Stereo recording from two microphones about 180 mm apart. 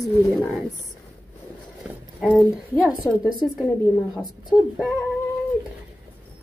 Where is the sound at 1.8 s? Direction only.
5° right (ahead or behind).